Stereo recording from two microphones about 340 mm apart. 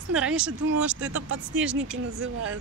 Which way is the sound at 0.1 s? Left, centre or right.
Centre.